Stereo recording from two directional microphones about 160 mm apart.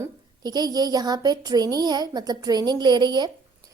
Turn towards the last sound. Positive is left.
turn(degrees=-25)  # may be behind; listen again after turning